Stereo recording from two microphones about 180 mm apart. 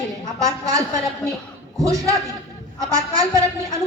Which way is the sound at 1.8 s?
20° right (ahead or behind).